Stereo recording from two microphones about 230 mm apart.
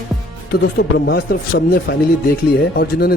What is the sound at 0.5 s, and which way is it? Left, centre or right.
Speech, left.